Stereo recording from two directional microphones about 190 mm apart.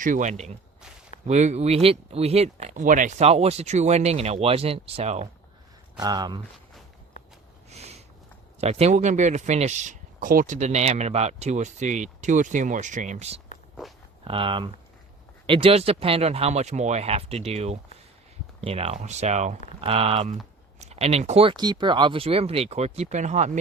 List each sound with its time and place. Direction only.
0.0 s speech: 40° right (ahead or behind)
6.0 s speech: 20° right (ahead or behind)
7.7 s a sound: 35° right (ahead or behind)
8.6 s speech: 35° right (ahead or behind)